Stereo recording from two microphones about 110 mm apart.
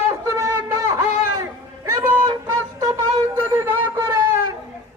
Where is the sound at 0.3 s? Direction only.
25° right (ahead or behind).